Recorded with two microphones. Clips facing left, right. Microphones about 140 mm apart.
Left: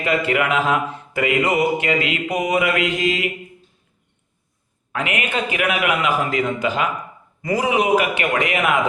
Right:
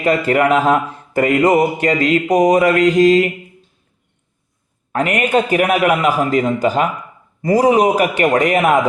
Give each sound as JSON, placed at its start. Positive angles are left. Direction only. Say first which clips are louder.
{"t": 0.0, "sound": "speech", "louder": "right 5 dB", "side_deg": -40}
{"t": 4.9, "sound": "speech", "louder": "right 8 dB", "side_deg": -45}